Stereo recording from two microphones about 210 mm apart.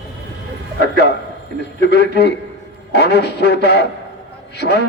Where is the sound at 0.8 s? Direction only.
50° left (ahead or behind).